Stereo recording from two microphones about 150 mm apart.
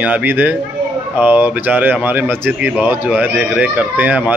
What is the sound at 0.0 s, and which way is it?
Speech, 10° right (ahead or behind).